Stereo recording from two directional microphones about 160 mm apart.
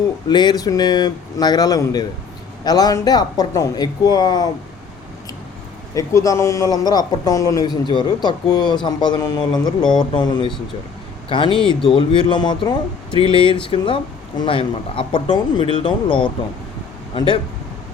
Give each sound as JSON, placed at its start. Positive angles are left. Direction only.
{"t": 0.3, "sound": "a man's voice", "side_deg": 25}
{"t": 5.9, "sound": "a man's voice", "side_deg": 20}